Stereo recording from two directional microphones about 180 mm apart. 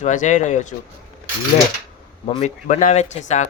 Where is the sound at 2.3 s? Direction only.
40° left (ahead or behind).